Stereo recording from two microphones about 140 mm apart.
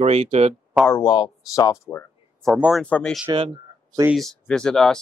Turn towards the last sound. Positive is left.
turn(degrees=5)  # may be behind; listen again after turning